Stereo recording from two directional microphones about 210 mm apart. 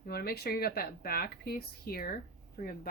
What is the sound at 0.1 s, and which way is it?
Speech, 45° left (ahead or behind).